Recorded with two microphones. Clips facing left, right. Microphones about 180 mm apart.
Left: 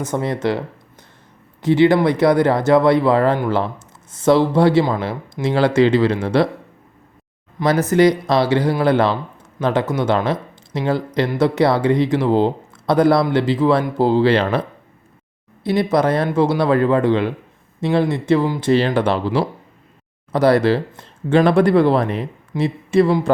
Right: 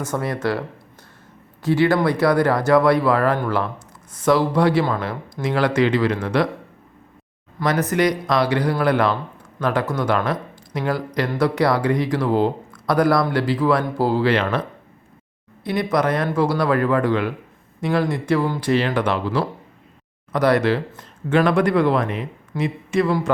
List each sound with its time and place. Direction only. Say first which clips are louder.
0.0 s speech: left 3 dB; 20° left (ahead or behind)
1.6 s speech: left 4 dB; 20° left (ahead or behind)
7.6 s speech: left 5 dB; 25° left (ahead or behind)
15.6 s speech: left 4 dB; 25° left (ahead or behind)